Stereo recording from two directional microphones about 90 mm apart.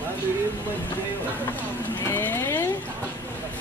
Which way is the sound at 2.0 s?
25° left (ahead or behind).